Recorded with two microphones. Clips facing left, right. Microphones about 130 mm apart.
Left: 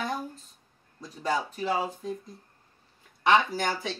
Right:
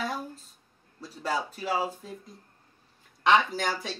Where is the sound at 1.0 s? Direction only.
10° right (ahead or behind).